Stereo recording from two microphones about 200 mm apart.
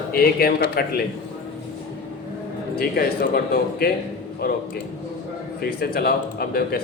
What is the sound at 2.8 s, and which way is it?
Speech, 50° left (ahead or behind).